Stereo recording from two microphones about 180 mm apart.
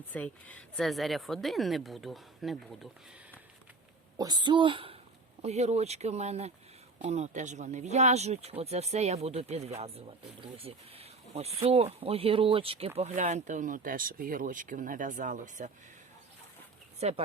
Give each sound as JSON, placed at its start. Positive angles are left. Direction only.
{"t": 0.1, "sound": "speech", "side_deg": 10}
{"t": 4.2, "sound": "speech", "side_deg": -25}
{"t": 13.0, "sound": "speech", "side_deg": -40}
{"t": 17.0, "sound": "speech", "side_deg": -35}